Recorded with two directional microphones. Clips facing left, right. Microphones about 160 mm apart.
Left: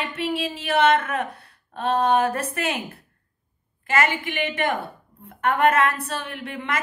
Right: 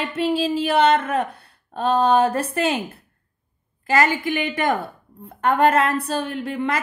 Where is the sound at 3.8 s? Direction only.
40° right (ahead or behind).